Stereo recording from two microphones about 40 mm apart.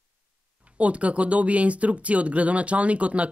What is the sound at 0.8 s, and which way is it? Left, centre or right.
Speech, right.